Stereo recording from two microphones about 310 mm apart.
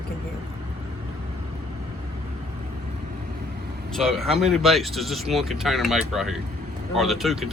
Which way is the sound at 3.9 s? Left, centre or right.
Centre.